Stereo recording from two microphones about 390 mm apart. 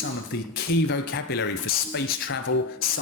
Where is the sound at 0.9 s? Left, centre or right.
Left.